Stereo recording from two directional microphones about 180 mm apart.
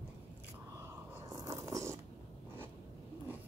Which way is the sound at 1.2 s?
20° right (ahead or behind).